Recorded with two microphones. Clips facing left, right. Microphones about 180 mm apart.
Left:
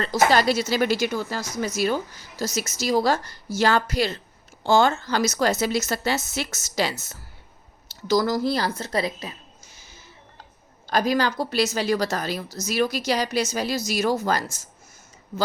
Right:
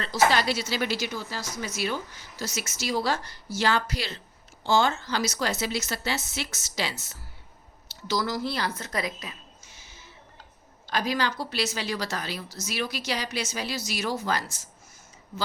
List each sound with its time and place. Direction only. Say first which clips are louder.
0.0 s speech: left 4 dB; 45° left (ahead or behind)
8.0 s a woman's voice: left 7 dB; 45° left (ahead or behind)